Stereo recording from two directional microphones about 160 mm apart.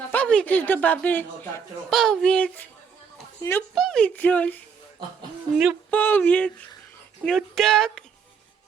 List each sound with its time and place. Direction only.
0.1 s a woman's voice: 10° left (ahead or behind)
3.4 s speech: 20° left (ahead or behind)
3.8 s a woman's voice: 5° left (ahead or behind)
5.9 s a woman's voice: 10° left (ahead or behind)
7.3 s a sound: centre (ahead or behind)